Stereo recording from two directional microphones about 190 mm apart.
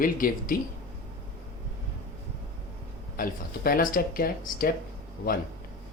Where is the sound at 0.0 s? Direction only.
50° left (ahead or behind).